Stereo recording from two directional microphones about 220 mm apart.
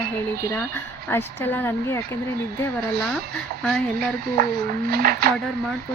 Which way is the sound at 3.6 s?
Centre (ahead or behind).